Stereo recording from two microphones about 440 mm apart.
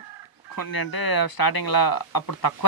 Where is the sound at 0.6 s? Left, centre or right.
Left.